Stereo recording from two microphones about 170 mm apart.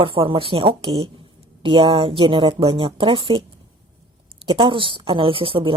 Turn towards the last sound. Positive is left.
turn(degrees=-30)  # may be behind; listen again after turning